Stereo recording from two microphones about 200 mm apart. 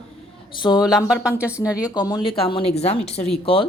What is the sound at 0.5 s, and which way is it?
Speech, 20° left (ahead or behind).